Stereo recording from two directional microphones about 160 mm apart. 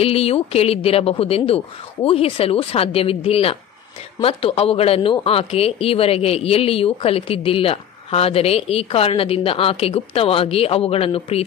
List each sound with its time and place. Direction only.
0.0 s speech: 40° left (ahead or behind)